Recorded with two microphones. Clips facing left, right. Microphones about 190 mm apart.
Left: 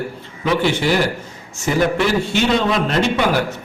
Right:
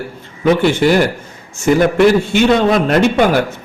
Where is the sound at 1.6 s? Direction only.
50° right (ahead or behind).